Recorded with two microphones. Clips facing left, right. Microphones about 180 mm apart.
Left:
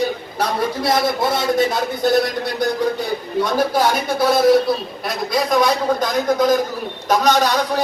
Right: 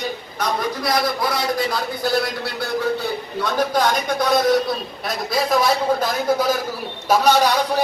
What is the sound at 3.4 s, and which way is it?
A man's voice, 10° left (ahead or behind).